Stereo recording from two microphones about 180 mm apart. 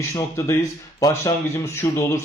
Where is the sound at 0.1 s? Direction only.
15° left (ahead or behind).